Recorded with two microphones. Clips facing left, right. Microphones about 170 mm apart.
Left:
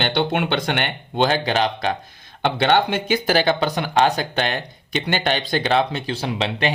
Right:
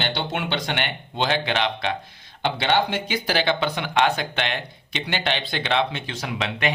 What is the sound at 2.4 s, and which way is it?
Speech, 55° left (ahead or behind).